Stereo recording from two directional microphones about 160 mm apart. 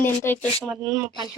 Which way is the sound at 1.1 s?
25° left (ahead or behind).